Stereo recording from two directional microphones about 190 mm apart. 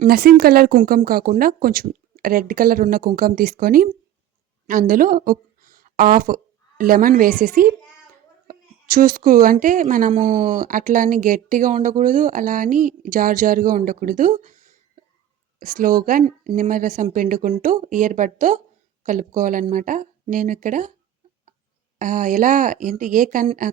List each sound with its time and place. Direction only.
0.0 s speech: 50° right (ahead or behind)
9.0 s speech: 45° right (ahead or behind)
21.9 s speech: 40° right (ahead or behind)